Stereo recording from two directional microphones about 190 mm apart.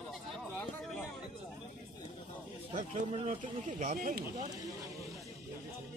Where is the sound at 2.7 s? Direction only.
40° right (ahead or behind).